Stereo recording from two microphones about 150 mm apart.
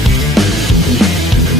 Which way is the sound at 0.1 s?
Centre (ahead or behind).